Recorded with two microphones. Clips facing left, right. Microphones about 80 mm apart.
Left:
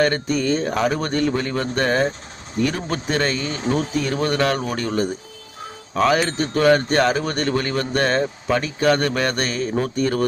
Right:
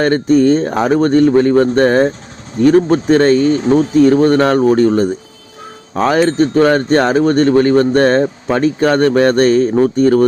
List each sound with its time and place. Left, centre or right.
0.0 s speech: right